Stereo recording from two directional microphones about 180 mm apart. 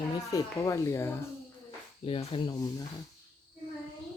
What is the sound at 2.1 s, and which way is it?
Speech, 30° left (ahead or behind).